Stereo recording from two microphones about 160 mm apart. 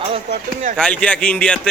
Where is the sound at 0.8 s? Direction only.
5° left (ahead or behind).